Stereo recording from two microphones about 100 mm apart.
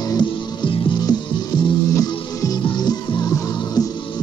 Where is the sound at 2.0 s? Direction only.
40° left (ahead or behind).